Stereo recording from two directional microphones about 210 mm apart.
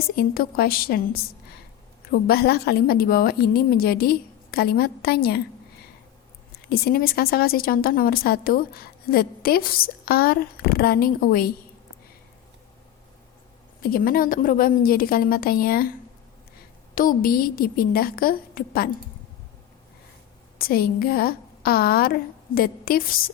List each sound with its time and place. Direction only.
0.2 s a woman's voice: 45° left (ahead or behind)
6.7 s a woman's voice: 45° left (ahead or behind)
13.8 s a woman's voice: 45° left (ahead or behind)
16.9 s a woman's voice: 40° left (ahead or behind)
20.6 s a woman's voice: 45° left (ahead or behind)